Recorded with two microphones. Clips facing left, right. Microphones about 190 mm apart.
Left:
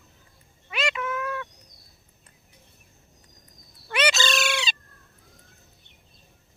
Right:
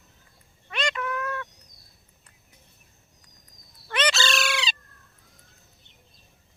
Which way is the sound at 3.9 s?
15° left (ahead or behind).